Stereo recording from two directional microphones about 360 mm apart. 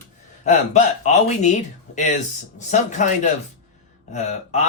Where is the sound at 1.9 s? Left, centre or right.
Centre.